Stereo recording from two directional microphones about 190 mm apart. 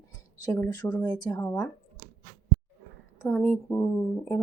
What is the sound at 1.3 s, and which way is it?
Speech, 10° left (ahead or behind).